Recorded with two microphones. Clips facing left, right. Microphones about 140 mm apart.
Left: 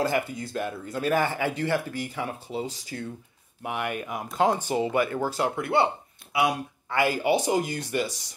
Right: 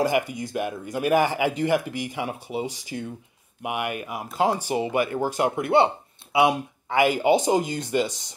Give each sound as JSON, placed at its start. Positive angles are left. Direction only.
{"t": 0.0, "sound": "speech", "side_deg": -15}